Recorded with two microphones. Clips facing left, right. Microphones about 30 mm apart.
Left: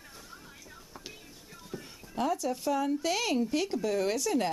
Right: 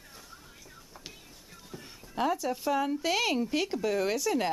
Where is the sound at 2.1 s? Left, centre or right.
Centre.